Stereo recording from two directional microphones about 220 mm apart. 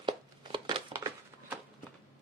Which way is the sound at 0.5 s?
20° right (ahead or behind).